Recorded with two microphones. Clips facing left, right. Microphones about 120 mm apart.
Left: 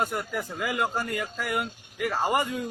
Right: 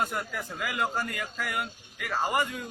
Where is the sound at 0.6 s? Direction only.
25° left (ahead or behind).